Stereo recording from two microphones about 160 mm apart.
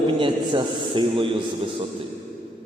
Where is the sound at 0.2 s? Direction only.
30° right (ahead or behind).